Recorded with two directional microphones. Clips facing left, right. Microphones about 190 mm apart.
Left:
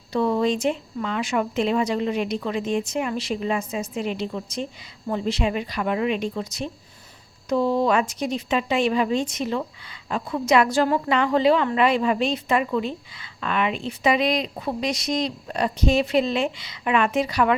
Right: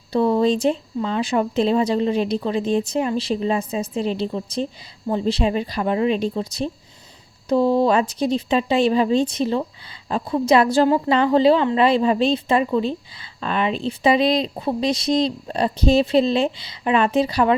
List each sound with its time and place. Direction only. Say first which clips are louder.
0.1 s a woman's voice: right 4 dB; 30° right (ahead or behind)